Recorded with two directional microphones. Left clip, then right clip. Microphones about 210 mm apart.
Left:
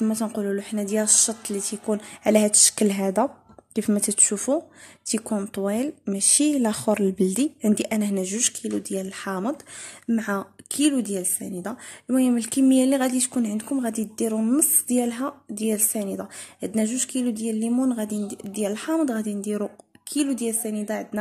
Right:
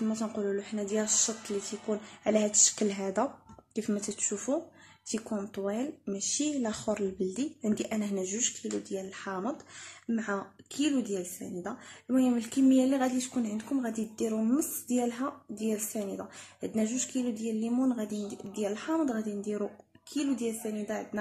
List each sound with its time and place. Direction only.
0.0 s speech: 45° left (ahead or behind)